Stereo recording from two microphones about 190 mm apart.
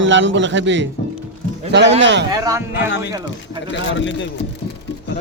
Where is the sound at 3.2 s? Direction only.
75° left (ahead or behind).